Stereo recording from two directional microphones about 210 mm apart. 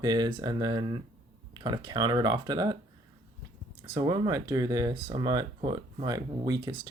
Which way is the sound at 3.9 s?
20° right (ahead or behind).